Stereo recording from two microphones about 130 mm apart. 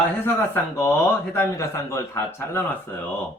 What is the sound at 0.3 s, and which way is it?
A man's voice, 15° left (ahead or behind).